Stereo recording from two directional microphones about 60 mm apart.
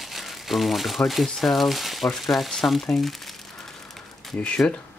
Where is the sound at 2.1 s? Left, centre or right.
Centre.